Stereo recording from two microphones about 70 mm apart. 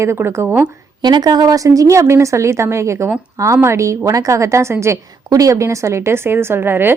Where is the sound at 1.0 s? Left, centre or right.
Right.